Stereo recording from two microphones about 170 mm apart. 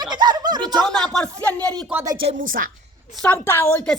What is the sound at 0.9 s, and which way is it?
Speech, 5° left (ahead or behind).